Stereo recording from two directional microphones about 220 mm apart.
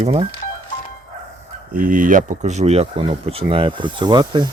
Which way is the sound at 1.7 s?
40° right (ahead or behind).